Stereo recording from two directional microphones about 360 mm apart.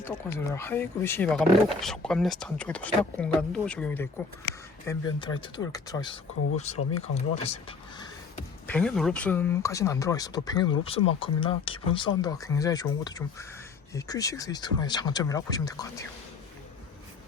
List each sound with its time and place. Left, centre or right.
0.0 s speech: centre
8.6 s speech: centre